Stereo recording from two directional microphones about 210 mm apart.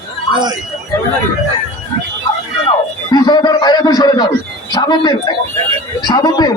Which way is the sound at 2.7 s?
20° left (ahead or behind).